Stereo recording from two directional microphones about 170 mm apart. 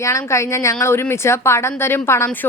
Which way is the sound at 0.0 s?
20° left (ahead or behind).